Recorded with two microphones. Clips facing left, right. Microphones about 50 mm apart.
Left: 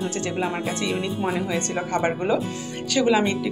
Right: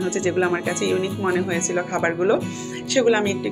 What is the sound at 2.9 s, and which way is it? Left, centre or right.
Speech, centre.